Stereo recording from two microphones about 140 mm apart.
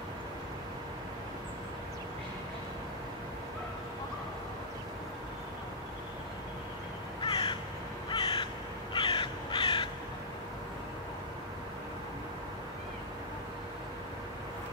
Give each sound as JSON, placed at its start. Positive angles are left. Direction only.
{"t": 7.2, "sound": "crow", "side_deg": 35}